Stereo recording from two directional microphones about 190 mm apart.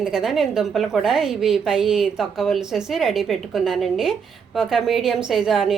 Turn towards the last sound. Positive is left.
turn(degrees=0)  # may be behind; listen again after turning